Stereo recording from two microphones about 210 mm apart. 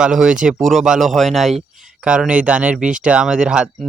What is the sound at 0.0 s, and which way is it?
A man's voice, 5° right (ahead or behind).